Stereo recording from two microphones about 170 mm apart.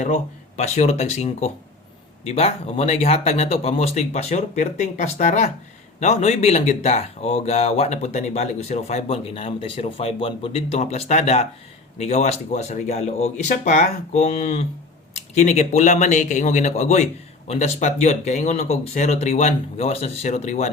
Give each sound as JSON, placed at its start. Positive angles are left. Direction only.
{"t": 0.0, "sound": "speech", "side_deg": 40}